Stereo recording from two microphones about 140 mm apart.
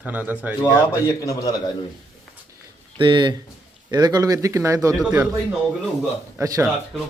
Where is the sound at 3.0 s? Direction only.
35° right (ahead or behind).